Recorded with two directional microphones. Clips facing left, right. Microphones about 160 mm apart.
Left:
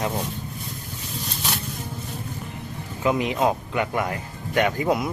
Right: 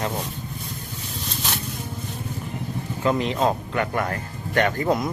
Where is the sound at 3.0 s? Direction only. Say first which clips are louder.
Even; 10° left (ahead or behind).